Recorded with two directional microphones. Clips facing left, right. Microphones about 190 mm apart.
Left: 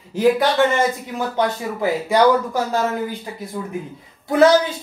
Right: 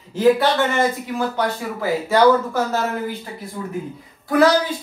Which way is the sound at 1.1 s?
20° left (ahead or behind).